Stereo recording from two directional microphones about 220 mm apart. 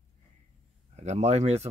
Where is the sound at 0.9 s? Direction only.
30° right (ahead or behind).